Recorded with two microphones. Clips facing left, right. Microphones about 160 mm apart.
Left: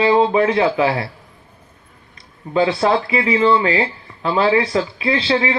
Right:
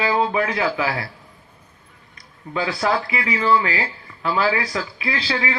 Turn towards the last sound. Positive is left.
turn(degrees=25)  # may be behind; listen again after turning